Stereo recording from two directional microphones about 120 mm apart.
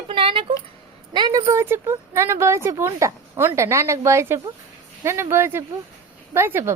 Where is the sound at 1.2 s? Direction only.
35° right (ahead or behind).